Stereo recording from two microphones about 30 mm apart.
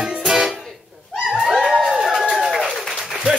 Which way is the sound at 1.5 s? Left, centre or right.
Centre.